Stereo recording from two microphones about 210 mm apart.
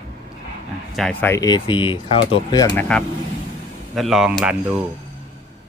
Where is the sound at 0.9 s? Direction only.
5° left (ahead or behind); by 2.7 s 25° left (ahead or behind).